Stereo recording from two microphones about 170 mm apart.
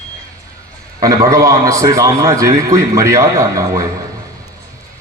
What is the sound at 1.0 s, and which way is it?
A man's voice, 20° right (ahead or behind).